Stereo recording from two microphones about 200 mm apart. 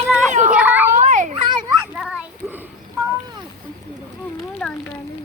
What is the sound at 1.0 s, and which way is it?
Children playing, 35° right (ahead or behind).